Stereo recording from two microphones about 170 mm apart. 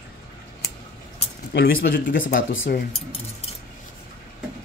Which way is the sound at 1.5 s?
70° left (ahead or behind).